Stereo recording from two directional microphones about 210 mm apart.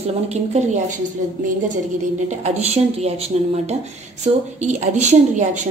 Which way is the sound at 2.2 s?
30° right (ahead or behind).